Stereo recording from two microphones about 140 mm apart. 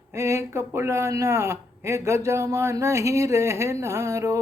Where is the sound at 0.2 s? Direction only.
20° right (ahead or behind).